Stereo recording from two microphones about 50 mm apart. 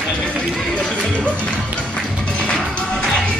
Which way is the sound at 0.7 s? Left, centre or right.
Left.